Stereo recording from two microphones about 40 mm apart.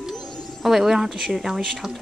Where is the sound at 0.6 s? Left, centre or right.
Centre.